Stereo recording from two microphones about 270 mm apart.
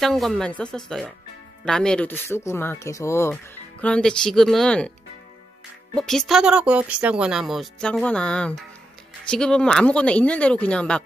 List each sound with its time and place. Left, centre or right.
0.0 s speech: centre
5.9 s speech: centre